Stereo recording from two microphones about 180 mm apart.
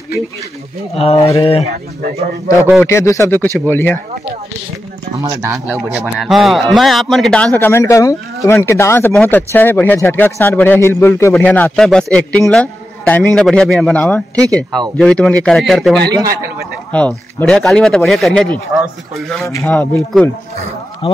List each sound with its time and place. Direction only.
0.9 s speech: 35° left (ahead or behind)
2.5 s speech: 20° left (ahead or behind)
5.5 s a man's voice: centre (ahead or behind)
7.5 s a man's voice: 15° left (ahead or behind)
21.0 s speech: 30° left (ahead or behind)